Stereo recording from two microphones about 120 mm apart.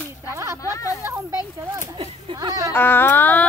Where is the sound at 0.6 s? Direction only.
25° left (ahead or behind).